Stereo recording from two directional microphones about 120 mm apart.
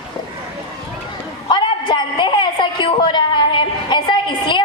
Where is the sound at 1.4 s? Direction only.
40° left (ahead or behind).